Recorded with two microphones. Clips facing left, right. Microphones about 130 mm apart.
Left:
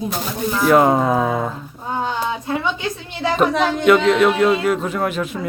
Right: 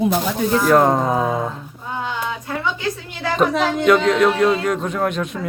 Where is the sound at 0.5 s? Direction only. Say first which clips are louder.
Left 1 dB; 5° left (ahead or behind).